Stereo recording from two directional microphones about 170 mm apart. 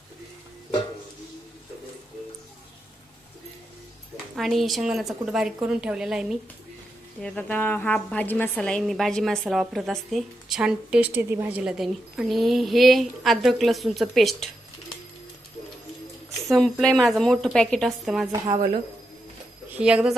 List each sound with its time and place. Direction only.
4.4 s a woman's voice: centre (ahead or behind)
7.2 s a woman's voice: 5° left (ahead or behind)
16.5 s a woman's voice: centre (ahead or behind)
18.3 s a woman's voice: 20° right (ahead or behind)
19.7 s a woman's voice: 5° right (ahead or behind)